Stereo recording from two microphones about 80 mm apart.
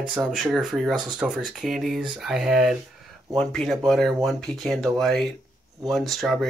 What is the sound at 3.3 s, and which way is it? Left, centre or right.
Speech, centre.